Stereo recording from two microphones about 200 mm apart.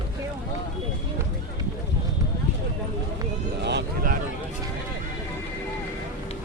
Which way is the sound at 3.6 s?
60° right (ahead or behind).